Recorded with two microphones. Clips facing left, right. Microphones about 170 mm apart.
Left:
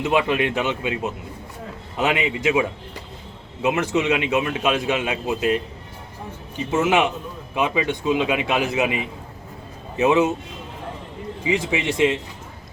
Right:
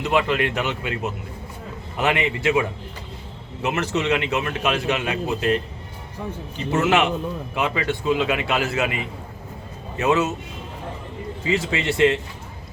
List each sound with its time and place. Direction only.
0.0 s a man's voice: 15° left (ahead or behind)
2.0 s a man's voice: 10° left (ahead or behind)
6.6 s a man's voice: 10° left (ahead or behind)
11.4 s a man's voice: 15° left (ahead or behind)